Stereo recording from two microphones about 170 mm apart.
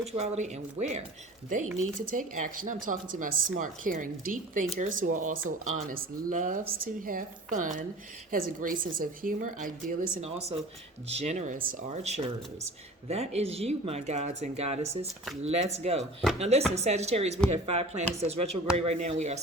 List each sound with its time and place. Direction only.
0.2 s a woman's voice: 40° right (ahead or behind)
11.1 s speech: 40° right (ahead or behind)
13.1 s speech: 35° right (ahead or behind)